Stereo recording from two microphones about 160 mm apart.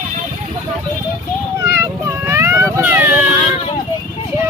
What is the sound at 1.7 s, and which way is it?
Vehicle, 15° right (ahead or behind).